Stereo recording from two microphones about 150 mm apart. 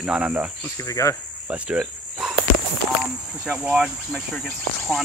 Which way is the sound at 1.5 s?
5° right (ahead or behind).